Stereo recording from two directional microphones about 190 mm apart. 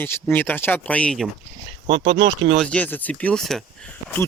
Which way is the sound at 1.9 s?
70° right (ahead or behind).